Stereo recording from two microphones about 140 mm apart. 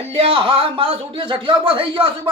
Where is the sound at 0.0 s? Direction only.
45° right (ahead or behind).